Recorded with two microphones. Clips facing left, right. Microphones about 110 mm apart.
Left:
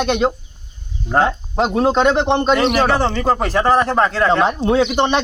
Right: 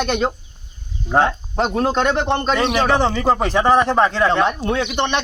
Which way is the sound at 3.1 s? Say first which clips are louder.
Even; 5° right (ahead or behind).